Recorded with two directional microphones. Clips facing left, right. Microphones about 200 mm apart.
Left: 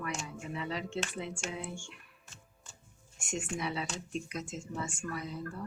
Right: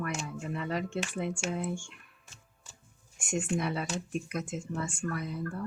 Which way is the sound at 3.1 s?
50° right (ahead or behind).